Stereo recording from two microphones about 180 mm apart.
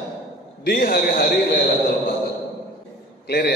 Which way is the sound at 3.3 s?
60° left (ahead or behind).